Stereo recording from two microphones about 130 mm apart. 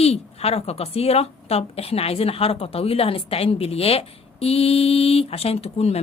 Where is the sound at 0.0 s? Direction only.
50° left (ahead or behind).